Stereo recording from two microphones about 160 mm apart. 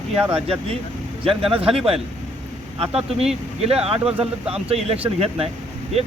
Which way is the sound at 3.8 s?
40° right (ahead or behind).